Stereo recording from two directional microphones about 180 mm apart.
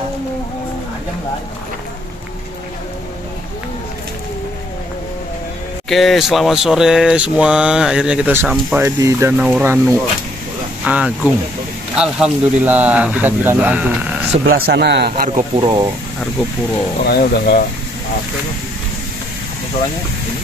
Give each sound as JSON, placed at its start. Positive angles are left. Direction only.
{"t": 5.9, "sound": "a sound", "side_deg": 0}
{"t": 8.6, "sound": "speech", "side_deg": -10}
{"t": 14.5, "sound": "speech", "side_deg": -70}
{"t": 15.5, "sound": "speech", "side_deg": -25}
{"t": 17.0, "sound": "speech", "side_deg": 60}